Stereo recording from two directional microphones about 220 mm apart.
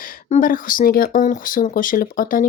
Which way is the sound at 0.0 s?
35° left (ahead or behind).